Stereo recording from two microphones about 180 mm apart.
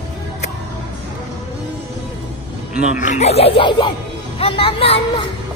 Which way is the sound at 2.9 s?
45° left (ahead or behind).